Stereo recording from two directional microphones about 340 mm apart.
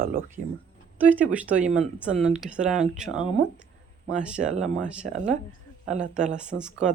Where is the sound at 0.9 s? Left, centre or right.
Centre.